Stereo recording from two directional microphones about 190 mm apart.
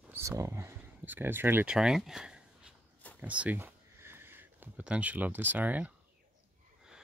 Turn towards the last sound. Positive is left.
turn(degrees=-10)  # may be behind; listen again after turning